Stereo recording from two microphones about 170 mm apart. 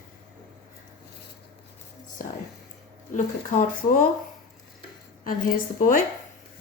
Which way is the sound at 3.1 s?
50° left (ahead or behind).